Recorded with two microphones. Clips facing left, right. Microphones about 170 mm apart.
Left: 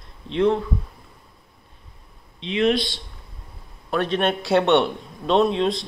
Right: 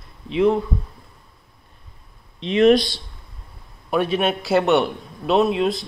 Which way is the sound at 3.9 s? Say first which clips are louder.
Right 2 dB; 10° right (ahead or behind).